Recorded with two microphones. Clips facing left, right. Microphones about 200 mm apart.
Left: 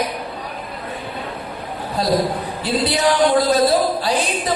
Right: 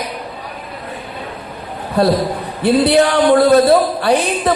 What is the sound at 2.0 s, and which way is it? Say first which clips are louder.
Speech: right 4 dB; 60° right (ahead or behind).